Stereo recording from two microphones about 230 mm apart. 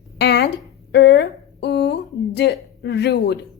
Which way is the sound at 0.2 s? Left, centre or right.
Left.